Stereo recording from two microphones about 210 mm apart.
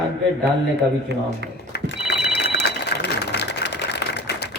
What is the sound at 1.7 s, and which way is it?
Telephone, 55° left (ahead or behind).